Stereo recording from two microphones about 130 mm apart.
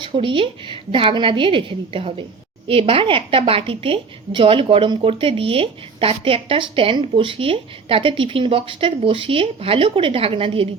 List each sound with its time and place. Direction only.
0.0 s a woman's voice: 40° right (ahead or behind)